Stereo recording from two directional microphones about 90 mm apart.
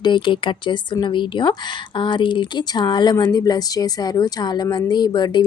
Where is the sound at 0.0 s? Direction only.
60° left (ahead or behind).